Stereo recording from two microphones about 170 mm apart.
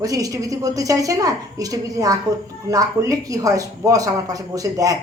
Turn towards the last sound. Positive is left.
turn(degrees=-20)  # may be behind; listen again after turning